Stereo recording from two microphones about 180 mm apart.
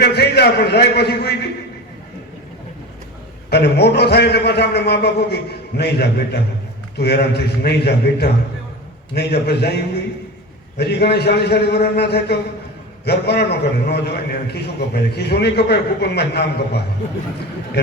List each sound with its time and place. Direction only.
0.0 s a man's voice: 65° left (ahead or behind)
3.5 s a man's voice: 70° left (ahead or behind)